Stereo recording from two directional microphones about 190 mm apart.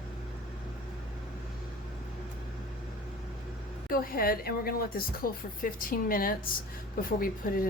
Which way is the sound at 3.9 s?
50° left (ahead or behind).